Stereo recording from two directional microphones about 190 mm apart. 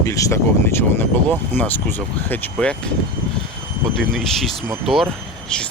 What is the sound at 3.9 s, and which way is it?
Speech, centre (ahead or behind).